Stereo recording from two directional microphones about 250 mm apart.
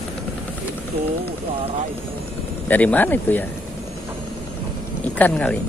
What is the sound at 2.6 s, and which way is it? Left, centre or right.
Speech, centre.